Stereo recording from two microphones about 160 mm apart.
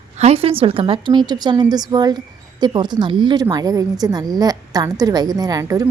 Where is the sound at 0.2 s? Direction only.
40° right (ahead or behind).